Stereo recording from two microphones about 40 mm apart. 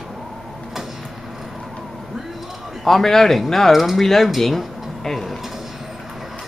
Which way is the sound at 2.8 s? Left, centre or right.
Centre.